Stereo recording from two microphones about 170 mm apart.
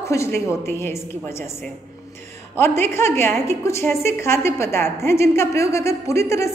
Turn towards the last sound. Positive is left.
turn(degrees=15)  # may be behind; listen again after turning